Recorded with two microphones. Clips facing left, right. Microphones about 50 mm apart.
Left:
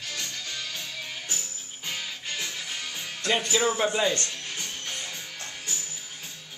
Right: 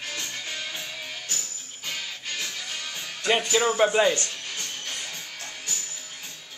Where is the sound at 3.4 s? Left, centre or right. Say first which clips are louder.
Right 4 dB; centre.